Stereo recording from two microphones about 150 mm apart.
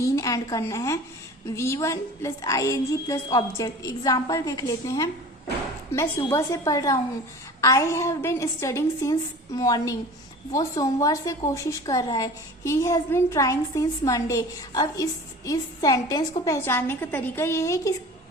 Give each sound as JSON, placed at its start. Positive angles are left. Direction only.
{"t": 0.0, "sound": "a woman's voice", "side_deg": 20}
{"t": 16.6, "sound": "a woman's voice", "side_deg": 15}